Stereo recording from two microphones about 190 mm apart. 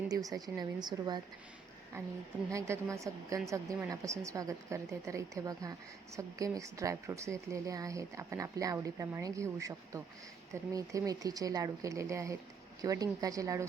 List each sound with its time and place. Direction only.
0.1 s a woman's voice: 20° right (ahead or behind)